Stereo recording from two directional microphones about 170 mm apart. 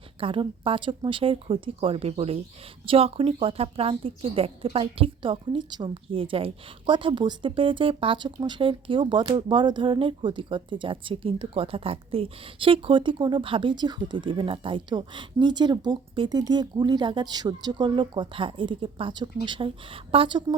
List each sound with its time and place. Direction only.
0.2 s speech: 30° right (ahead or behind)